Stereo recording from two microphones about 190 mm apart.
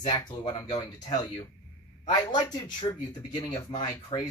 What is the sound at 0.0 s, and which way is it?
Speech, 25° left (ahead or behind).